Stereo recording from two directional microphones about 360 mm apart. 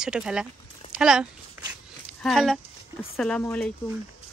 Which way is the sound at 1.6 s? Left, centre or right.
Centre.